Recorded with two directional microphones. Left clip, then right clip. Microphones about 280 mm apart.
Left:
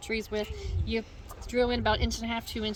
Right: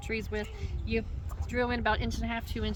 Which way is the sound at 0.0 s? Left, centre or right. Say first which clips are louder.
Left 3 dB; centre.